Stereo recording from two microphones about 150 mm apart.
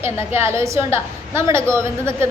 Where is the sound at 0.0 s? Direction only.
15° right (ahead or behind).